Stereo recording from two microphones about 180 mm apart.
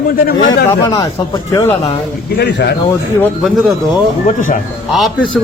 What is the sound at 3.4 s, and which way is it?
Speech, centre (ahead or behind).